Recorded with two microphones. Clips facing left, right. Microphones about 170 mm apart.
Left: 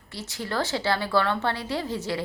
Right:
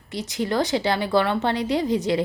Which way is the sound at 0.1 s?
20° right (ahead or behind).